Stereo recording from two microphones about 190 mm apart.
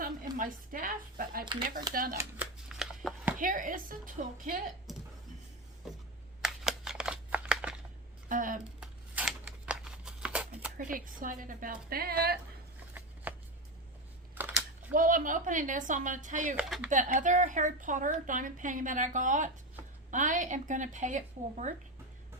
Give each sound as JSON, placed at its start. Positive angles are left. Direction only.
{"t": 0.3, "sound": "speech", "side_deg": -45}
{"t": 2.1, "sound": "shuffling cards", "side_deg": -5}
{"t": 3.3, "sound": "speech", "side_deg": -45}
{"t": 6.4, "sound": "a sound", "side_deg": -5}
{"t": 8.3, "sound": "speech", "side_deg": -45}
{"t": 8.8, "sound": "a sound", "side_deg": -5}
{"t": 10.8, "sound": "speech", "side_deg": -45}
{"t": 13.3, "sound": "shuffling cards", "side_deg": -10}
{"t": 14.3, "sound": "a sound", "side_deg": -10}
{"t": 14.9, "sound": "speech", "side_deg": -45}
{"t": 16.6, "sound": "speech", "side_deg": -5}
{"t": 16.9, "sound": "a woman's voice", "side_deg": -40}